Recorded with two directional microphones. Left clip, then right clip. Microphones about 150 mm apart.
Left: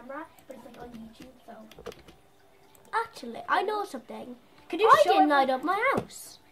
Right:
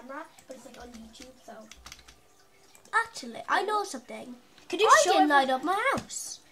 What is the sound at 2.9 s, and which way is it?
Speech, 5° right (ahead or behind).